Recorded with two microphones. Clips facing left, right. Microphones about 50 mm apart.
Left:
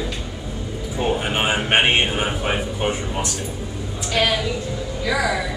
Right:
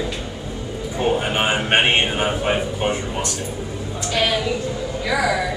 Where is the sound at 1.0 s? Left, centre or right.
Centre.